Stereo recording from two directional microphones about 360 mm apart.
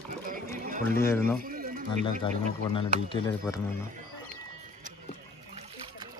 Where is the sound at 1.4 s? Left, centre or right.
Right.